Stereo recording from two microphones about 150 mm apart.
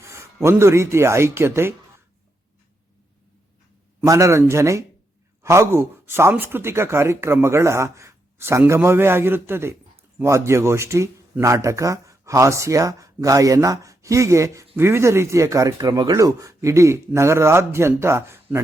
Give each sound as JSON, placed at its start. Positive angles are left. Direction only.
{"t": 0.0, "sound": "a sound", "side_deg": -20}
{"t": 0.4, "sound": "speech", "side_deg": -15}
{"t": 4.0, "sound": "speech", "side_deg": -20}